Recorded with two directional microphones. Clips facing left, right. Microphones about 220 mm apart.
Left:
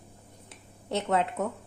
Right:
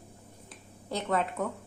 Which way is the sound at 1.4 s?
25° left (ahead or behind).